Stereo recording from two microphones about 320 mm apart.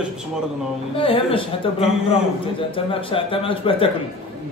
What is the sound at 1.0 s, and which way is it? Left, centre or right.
Speech, centre.